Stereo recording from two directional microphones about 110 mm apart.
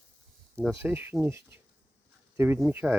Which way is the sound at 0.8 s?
20° right (ahead or behind).